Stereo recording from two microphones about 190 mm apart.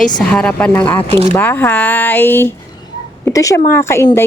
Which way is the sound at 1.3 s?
10° left (ahead or behind).